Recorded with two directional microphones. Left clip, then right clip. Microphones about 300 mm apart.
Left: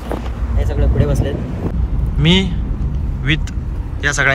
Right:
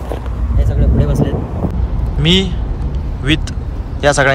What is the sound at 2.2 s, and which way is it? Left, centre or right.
Speech, centre.